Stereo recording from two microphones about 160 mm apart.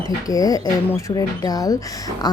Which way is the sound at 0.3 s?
25° left (ahead or behind).